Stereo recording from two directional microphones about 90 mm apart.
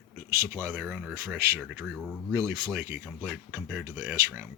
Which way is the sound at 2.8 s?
20° right (ahead or behind).